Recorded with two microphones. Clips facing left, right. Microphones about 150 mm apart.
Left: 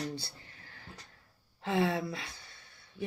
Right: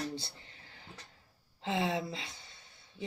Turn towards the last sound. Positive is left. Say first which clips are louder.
# left 4 dB
turn(degrees=-20)  # may be behind; listen again after turning